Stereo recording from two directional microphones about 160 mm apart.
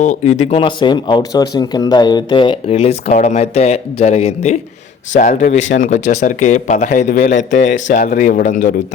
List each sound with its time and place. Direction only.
0.0 s speech: 50° left (ahead or behind); by 2.7 s 30° left (ahead or behind)
2.7 s speech: 45° left (ahead or behind)